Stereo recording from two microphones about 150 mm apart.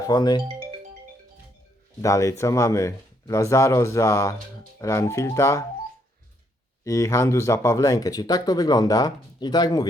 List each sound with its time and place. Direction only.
0.1 s speech: 25° left (ahead or behind)
2.0 s speech: 20° left (ahead or behind)
6.8 s speech: 20° left (ahead or behind)